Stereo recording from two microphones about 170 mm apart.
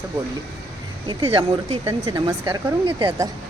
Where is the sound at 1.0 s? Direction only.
30° right (ahead or behind).